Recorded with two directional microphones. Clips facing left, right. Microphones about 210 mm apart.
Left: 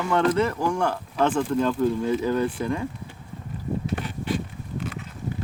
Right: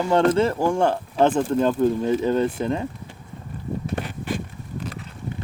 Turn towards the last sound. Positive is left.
turn(degrees=-35)  # may be behind; listen again after turning